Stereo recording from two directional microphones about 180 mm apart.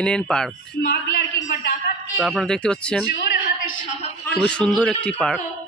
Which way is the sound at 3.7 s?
45° left (ahead or behind).